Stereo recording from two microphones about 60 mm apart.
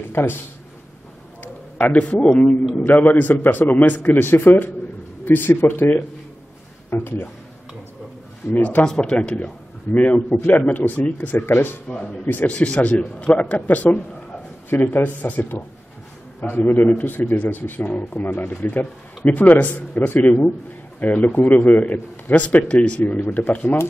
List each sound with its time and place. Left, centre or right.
0.1 s speech: left
1.9 s a man's voice: left
7.0 s a man's voice: left
8.5 s a man's voice: left
8.8 s a man's voice: centre; by 11.7 s left
11.9 s a man's voice: centre
12.3 s a man's voice: left
12.5 s a man's voice: left
16.6 s a man's voice: left